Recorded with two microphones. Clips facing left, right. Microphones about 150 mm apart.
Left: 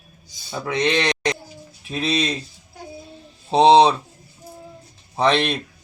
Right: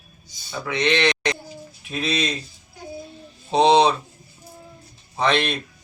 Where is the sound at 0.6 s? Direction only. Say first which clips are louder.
Even; 40° left (ahead or behind).